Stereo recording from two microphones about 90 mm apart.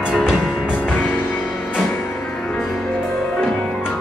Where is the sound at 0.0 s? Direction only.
5° right (ahead or behind).